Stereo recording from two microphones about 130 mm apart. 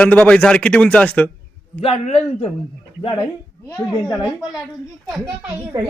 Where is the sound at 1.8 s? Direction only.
55° left (ahead or behind).